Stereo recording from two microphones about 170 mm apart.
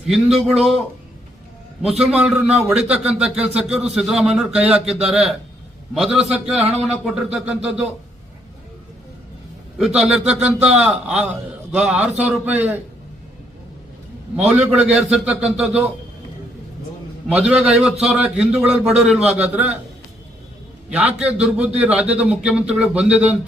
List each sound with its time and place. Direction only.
0.3 s a man's voice: centre (ahead or behind)
1.8 s a man's voice: 5° right (ahead or behind)
9.7 s a man's voice: centre (ahead or behind)
10.4 s speech: 40° right (ahead or behind)
10.8 s a man's voice: 5° right (ahead or behind)
14.3 s speech: 5° right (ahead or behind)
17.2 s a man's voice: 5° right (ahead or behind)
20.9 s speech: 10° right (ahead or behind)